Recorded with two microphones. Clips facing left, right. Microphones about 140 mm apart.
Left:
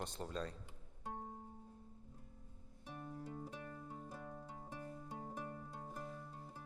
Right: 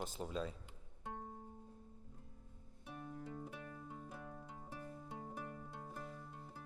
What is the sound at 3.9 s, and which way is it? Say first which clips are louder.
Music: left 1 dB; 15° left (ahead or behind).